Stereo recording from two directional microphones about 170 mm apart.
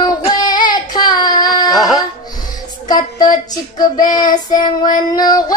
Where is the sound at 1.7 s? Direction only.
Centre (ahead or behind).